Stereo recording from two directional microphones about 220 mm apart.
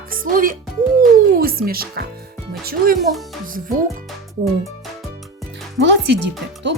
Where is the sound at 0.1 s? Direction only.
40° right (ahead or behind).